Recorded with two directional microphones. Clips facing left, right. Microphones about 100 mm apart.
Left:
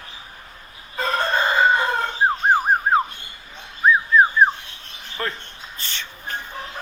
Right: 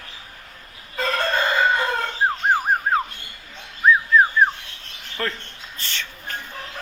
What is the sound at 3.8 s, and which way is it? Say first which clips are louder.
Whistling: even; 25° left (ahead or behind).